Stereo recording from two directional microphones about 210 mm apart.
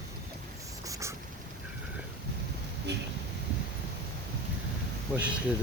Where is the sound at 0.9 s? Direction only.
15° right (ahead or behind).